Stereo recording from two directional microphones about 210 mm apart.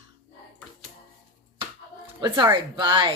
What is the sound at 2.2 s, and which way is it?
Speech, 20° right (ahead or behind).